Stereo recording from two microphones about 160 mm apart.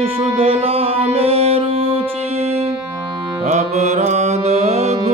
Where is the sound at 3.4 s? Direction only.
45° right (ahead or behind).